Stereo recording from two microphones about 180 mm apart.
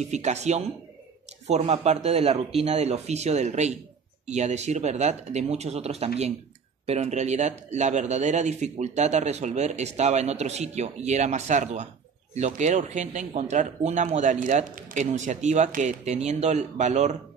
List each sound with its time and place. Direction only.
0.1 s a man's voice: 40° right (ahead or behind)
1.7 s a man's voice: 35° right (ahead or behind)